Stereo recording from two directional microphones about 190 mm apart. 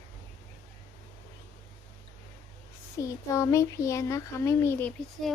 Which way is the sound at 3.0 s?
15° left (ahead or behind).